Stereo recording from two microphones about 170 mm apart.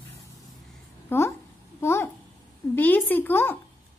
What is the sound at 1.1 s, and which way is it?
A child's voice, 10° left (ahead or behind).